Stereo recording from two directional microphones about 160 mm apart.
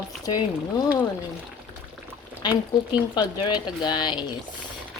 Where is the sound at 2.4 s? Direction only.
25° left (ahead or behind).